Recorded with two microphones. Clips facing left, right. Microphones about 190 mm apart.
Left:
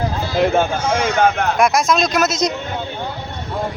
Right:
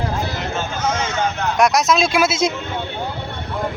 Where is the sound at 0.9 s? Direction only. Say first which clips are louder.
Left 5 dB; 15° left (ahead or behind).